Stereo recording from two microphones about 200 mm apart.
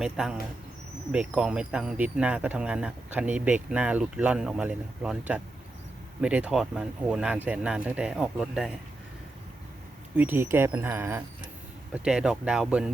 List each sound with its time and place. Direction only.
0.0 s speech: 5° right (ahead or behind)
10.2 s speech: 10° right (ahead or behind)